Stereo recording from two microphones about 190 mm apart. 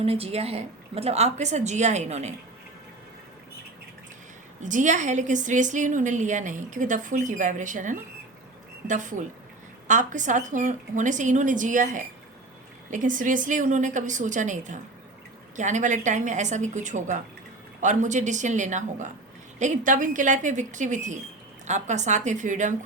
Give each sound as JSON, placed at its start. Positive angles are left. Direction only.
{"t": 0.0, "sound": "a woman's voice", "side_deg": -30}
{"t": 4.6, "sound": "a woman's voice", "side_deg": -40}